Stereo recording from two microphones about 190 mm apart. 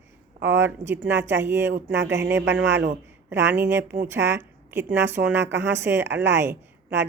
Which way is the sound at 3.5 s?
10° right (ahead or behind).